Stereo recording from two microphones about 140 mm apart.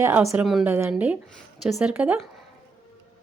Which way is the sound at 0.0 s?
20° right (ahead or behind).